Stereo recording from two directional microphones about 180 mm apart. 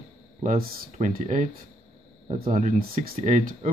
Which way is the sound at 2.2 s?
35° right (ahead or behind).